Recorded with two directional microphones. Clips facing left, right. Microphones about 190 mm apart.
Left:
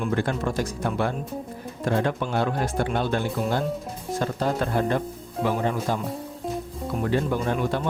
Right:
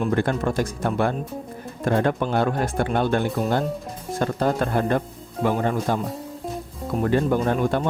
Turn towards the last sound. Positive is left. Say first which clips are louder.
# right 3 dB
turn(degrees=-50)  # may be behind; listen again after turning